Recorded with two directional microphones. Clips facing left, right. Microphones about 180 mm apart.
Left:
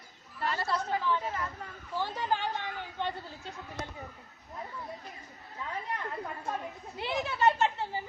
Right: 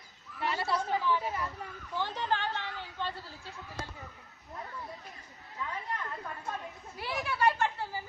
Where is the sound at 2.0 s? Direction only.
10° left (ahead or behind).